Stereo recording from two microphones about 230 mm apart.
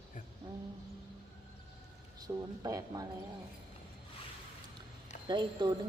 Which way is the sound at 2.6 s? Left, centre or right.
Centre.